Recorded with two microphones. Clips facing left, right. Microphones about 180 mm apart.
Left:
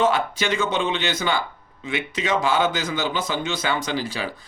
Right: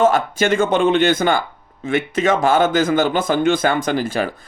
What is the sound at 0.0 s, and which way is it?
A man's voice, 50° right (ahead or behind).